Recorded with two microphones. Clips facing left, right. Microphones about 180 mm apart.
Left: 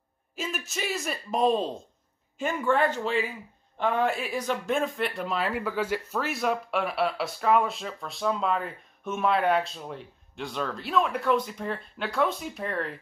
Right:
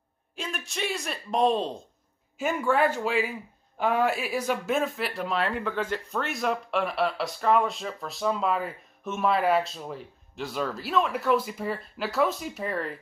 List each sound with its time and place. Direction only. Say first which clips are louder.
0.4 s speech: even; 5° left (ahead or behind)